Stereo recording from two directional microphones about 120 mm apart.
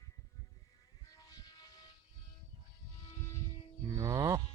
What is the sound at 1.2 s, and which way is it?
Vehicle, 30° left (ahead or behind).